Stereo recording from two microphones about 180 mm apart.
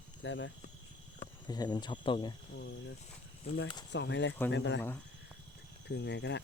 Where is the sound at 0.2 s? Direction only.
90° left.